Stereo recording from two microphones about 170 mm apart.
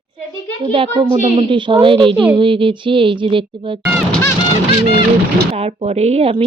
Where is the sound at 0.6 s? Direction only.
30° right (ahead or behind).